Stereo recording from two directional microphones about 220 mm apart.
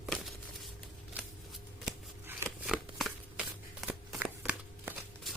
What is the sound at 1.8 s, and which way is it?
Shuffling cards, centre (ahead or behind).